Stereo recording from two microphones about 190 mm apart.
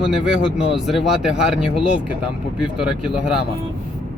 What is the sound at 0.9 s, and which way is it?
Speech, centre (ahead or behind).